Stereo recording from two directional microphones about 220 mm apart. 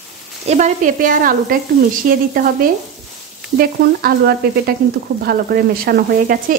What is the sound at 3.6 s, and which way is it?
Frying, 45° right (ahead or behind).